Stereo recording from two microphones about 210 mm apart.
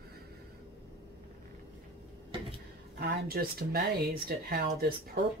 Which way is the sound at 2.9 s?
45° right (ahead or behind).